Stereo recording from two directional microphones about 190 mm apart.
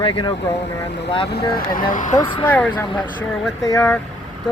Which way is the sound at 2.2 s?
30° left (ahead or behind).